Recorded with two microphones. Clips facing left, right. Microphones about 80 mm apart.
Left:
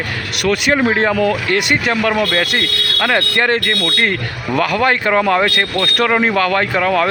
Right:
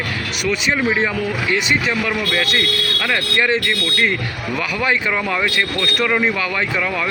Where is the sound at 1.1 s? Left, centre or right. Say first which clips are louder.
Left 5 dB; left.